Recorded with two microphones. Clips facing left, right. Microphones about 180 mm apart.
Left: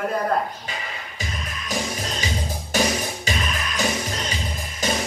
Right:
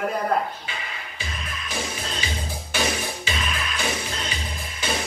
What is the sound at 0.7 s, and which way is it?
Music, 40° left (ahead or behind).